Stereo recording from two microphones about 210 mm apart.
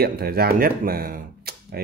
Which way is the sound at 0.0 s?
45° right (ahead or behind).